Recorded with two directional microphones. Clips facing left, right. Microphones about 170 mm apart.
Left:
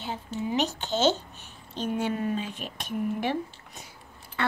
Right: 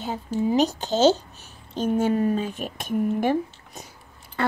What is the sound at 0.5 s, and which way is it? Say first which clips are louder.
A child's voice: right 6 dB; 40° right (ahead or behind).